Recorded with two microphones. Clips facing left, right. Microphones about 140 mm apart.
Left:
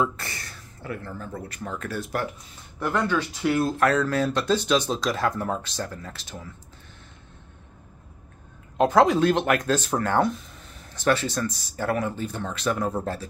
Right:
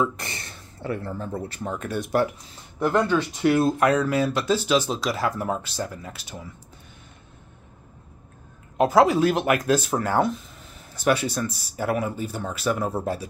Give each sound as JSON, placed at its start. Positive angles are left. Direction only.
{"t": 0.1, "sound": "speech", "side_deg": -20}
{"t": 8.7, "sound": "speech", "side_deg": -5}